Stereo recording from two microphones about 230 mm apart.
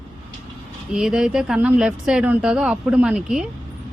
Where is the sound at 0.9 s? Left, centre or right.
Centre.